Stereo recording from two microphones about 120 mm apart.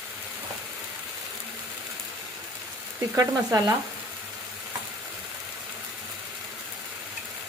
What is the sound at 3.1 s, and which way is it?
Frying, 30° right (ahead or behind).